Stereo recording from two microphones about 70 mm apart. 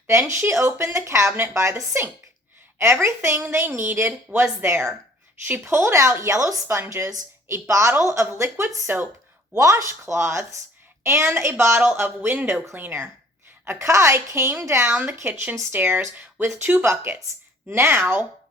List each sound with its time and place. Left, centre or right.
0.1 s a woman's voice: right
6.7 s a woman's voice: right
11.8 s speech: right
13.7 s a woman's voice: right
15.0 s speech: right